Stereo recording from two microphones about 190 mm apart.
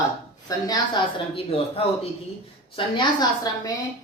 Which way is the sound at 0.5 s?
20° left (ahead or behind).